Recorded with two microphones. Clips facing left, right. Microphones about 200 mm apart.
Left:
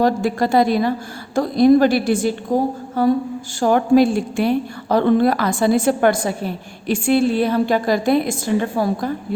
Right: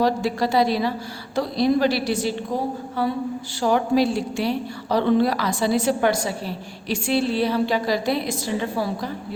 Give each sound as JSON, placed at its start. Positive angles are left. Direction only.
{"t": 0.0, "sound": "a woman's voice", "side_deg": 50}